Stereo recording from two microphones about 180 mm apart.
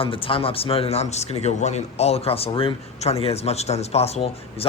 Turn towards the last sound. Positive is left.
turn(degrees=35)  # may be behind; listen again after turning